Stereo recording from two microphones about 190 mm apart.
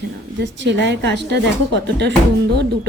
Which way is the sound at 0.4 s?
70° right (ahead or behind).